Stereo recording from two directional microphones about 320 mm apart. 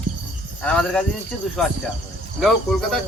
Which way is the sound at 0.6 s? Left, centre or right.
Centre.